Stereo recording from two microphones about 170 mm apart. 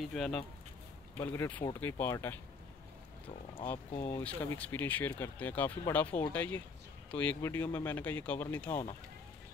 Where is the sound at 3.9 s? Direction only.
40° left (ahead or behind).